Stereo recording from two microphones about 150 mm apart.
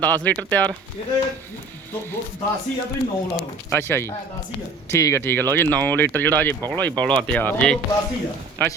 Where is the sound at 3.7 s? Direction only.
15° left (ahead or behind).